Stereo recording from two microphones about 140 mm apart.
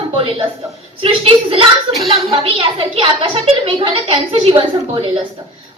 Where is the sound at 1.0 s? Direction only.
40° right (ahead or behind).